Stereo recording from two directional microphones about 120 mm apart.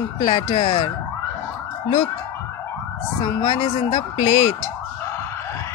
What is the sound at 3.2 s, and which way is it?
Speech, 50° left (ahead or behind).